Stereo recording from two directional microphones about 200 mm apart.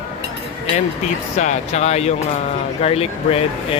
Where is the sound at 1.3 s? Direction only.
35° left (ahead or behind).